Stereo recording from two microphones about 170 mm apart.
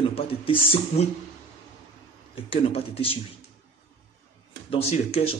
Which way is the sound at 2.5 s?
35° left (ahead or behind).